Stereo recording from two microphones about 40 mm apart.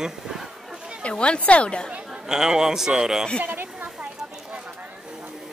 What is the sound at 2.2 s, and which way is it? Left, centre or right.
A man's voice, centre.